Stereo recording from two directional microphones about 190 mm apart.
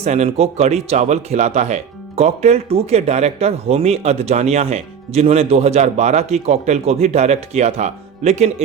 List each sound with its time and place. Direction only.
0.0 s speech: 35° right (ahead or behind)